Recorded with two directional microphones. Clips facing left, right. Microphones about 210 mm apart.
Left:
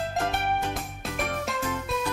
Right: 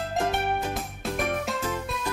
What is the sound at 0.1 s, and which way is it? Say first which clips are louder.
Music: right 1 dB; centre (ahead or behind).